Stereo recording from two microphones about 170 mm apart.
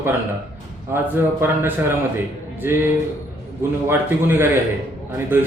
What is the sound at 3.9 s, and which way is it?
Speech, 10° right (ahead or behind).